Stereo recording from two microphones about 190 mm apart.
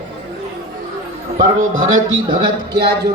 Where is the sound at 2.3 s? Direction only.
55° right (ahead or behind).